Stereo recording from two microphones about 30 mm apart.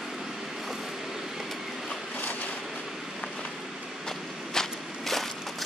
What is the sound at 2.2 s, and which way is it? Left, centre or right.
Train, left.